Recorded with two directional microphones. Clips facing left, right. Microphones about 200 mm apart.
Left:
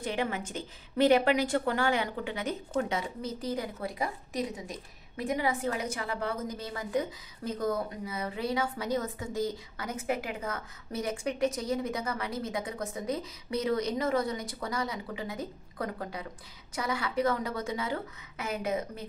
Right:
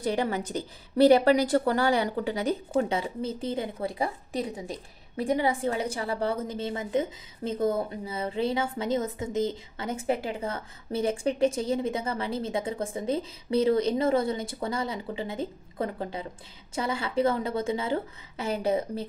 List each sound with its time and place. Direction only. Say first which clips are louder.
0.0 s a woman's voice: right 5 dB; 35° right (ahead or behind)